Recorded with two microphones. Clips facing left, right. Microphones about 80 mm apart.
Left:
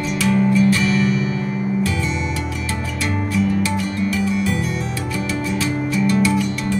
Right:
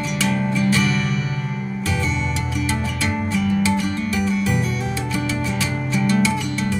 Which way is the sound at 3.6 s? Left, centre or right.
Right.